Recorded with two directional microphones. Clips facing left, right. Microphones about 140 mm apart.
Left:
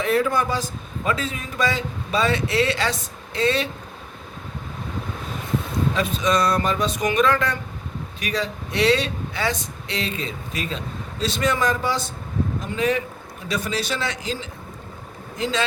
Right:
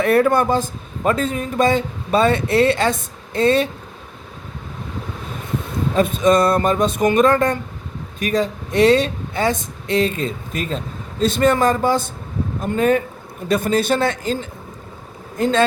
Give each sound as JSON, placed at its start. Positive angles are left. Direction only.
{"t": 0.0, "sound": "speech", "side_deg": -60}
{"t": 5.9, "sound": "speech", "side_deg": -50}